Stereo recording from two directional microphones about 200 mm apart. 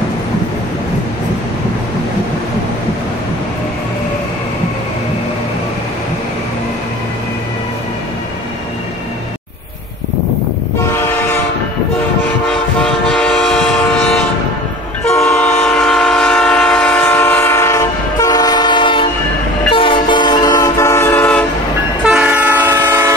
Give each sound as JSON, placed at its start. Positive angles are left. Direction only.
{"t": 12.8, "sound": "vehicle", "side_deg": 5}
{"t": 15.3, "sound": "train", "side_deg": 5}
{"t": 22.0, "sound": "train", "side_deg": -5}